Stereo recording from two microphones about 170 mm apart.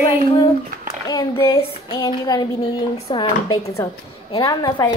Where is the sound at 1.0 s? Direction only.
20° left (ahead or behind).